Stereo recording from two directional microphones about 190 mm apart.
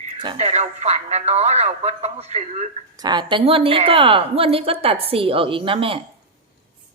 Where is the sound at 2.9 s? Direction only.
20° right (ahead or behind).